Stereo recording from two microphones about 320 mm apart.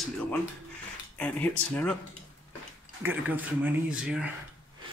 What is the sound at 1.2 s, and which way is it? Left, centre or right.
Speech, centre.